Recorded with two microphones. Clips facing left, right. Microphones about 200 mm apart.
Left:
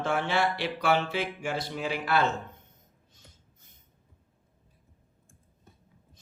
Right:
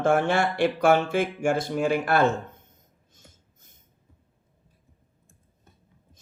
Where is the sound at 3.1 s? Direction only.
45° right (ahead or behind).